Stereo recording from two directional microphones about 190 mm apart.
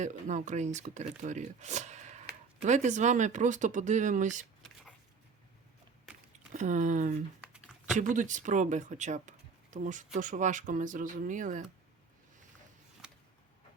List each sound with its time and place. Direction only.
0.0 s speech: 40° right (ahead or behind)
6.5 s speech: 40° right (ahead or behind)
7.5 s a sound: 5° right (ahead or behind)
7.9 s speech: 40° right (ahead or behind)
13.0 s vehicle: 5° right (ahead or behind)